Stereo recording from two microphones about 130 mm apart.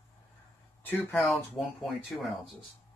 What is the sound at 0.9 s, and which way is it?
Speech, 15° left (ahead or behind).